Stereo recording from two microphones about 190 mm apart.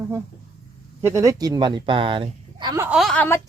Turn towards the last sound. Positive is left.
turn(degrees=10)  # may be behind; listen again after turning